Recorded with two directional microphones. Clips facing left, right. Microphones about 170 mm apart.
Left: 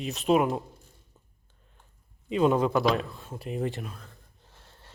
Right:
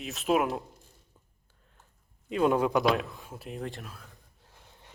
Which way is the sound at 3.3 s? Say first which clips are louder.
Left 6 dB; centre (ahead or behind).